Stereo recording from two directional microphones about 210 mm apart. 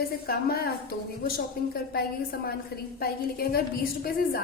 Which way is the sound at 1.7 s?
45° left (ahead or behind).